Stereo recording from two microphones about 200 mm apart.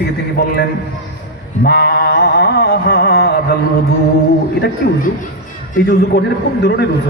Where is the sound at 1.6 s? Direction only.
50° left (ahead or behind).